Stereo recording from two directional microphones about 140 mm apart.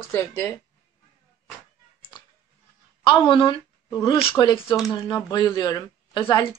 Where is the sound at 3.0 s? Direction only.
35° left (ahead or behind).